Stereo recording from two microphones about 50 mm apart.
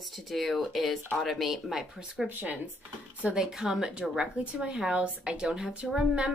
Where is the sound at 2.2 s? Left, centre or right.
Right.